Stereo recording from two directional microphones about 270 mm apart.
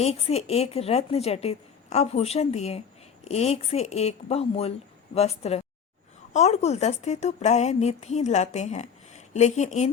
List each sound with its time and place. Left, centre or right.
0.0 s a woman's voice: left